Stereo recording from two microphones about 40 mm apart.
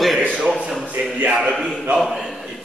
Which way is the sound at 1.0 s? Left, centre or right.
Right.